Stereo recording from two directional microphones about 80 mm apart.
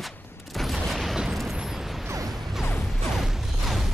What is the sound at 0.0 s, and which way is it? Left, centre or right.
Fusillade, centre.